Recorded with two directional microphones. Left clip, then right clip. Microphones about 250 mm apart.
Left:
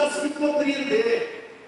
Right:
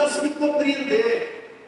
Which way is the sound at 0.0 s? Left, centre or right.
Centre.